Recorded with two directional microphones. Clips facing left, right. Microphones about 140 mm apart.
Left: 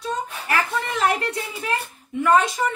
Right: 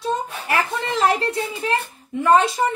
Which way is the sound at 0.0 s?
25° right (ahead or behind).